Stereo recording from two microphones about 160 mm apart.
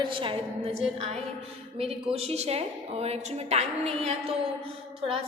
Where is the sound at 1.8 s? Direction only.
40° right (ahead or behind).